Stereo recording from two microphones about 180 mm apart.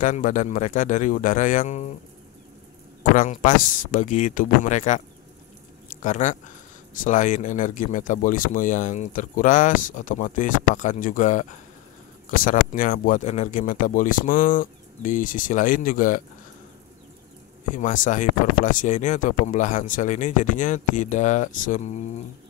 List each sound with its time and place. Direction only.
0.0 s speech: 45° left (ahead or behind)
3.0 s speech: 45° left (ahead or behind)
6.0 s speech: 45° left (ahead or behind)
17.7 s speech: 45° left (ahead or behind)